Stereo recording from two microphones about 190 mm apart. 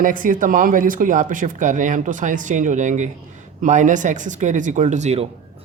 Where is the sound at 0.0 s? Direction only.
45° right (ahead or behind).